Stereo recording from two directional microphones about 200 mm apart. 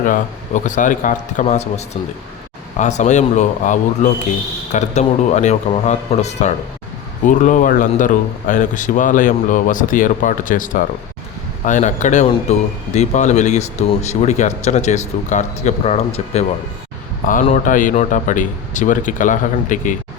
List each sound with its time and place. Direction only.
0.0 s a man's voice: 40° left (ahead or behind)